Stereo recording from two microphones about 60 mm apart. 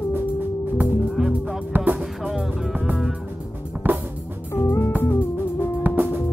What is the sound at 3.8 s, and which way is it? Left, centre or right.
Music, right.